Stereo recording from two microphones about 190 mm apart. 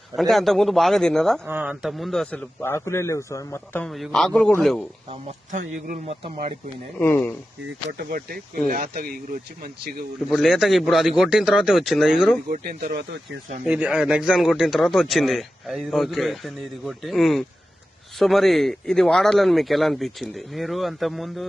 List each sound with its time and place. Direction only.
0.2 s speech: centre (ahead or behind)
1.5 s speech: 10° right (ahead or behind)
5.5 s speech: 40° right (ahead or behind)
7.0 s speech: 10° left (ahead or behind)
7.9 s speech: 50° right (ahead or behind)
10.2 s speech: centre (ahead or behind)
12.5 s speech: 45° right (ahead or behind)
13.7 s speech: 5° right (ahead or behind)